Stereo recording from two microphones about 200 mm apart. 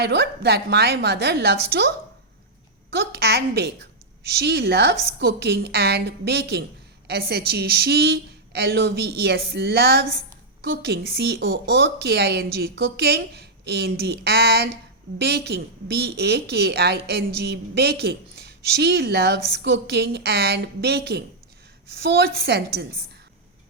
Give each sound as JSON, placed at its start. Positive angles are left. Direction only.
{"t": 0.0, "sound": "speech", "side_deg": -55}
{"t": 2.9, "sound": "a woman's voice", "side_deg": -55}